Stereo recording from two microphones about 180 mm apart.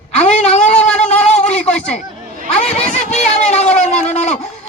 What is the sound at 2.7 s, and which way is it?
Speech, 40° left (ahead or behind).